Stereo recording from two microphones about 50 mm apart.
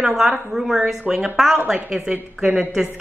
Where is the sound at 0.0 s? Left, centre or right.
Centre.